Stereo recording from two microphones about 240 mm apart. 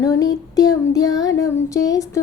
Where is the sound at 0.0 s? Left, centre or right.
Centre.